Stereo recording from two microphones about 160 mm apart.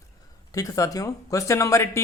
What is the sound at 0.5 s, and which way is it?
Speech, 20° left (ahead or behind).